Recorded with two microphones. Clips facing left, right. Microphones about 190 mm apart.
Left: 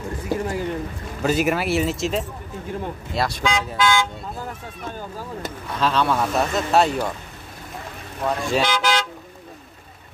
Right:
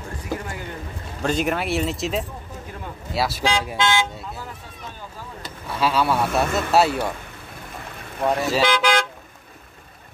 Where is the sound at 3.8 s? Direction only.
20° right (ahead or behind).